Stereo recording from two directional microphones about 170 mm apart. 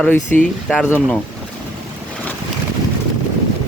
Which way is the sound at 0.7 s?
5° right (ahead or behind).